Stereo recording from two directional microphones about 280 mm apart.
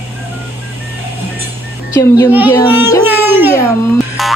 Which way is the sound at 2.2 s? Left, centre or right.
Centre.